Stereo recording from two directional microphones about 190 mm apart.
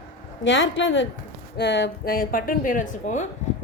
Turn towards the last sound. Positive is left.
turn(degrees=40)  # may be behind; listen again after turning